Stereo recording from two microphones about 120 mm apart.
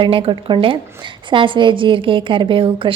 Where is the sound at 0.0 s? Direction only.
45° right (ahead or behind).